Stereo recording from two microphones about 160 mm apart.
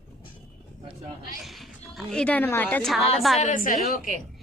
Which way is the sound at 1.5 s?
Centre (ahead or behind).